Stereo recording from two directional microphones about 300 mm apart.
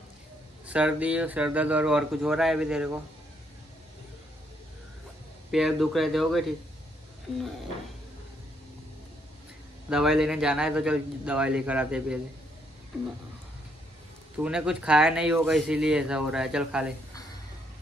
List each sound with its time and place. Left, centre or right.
0.7 s speech: centre
5.5 s speech: centre
9.8 s speech: centre
14.4 s speech: centre